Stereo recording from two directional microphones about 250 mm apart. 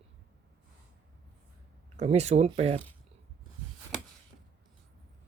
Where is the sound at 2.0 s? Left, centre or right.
Right.